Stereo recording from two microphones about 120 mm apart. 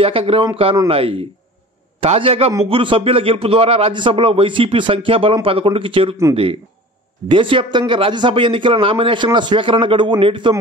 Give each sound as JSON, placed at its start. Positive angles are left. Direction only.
{"t": 0.0, "sound": "speech", "side_deg": -50}
{"t": 7.2, "sound": "speech", "side_deg": -45}